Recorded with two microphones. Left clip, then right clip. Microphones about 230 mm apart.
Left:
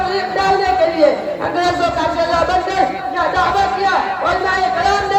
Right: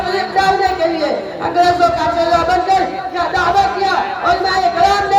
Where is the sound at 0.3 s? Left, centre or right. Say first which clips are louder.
Even; right.